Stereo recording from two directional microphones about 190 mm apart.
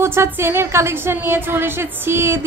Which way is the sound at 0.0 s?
15° right (ahead or behind).